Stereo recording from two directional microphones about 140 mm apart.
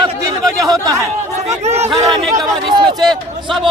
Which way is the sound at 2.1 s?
25° right (ahead or behind).